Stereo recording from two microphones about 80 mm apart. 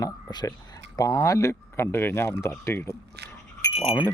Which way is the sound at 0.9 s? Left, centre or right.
Left.